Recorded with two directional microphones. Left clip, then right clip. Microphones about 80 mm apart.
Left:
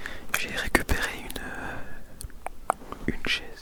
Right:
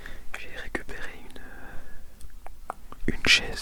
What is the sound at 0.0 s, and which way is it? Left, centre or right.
Whispering, left.